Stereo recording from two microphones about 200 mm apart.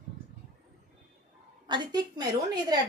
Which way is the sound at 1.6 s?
20° right (ahead or behind).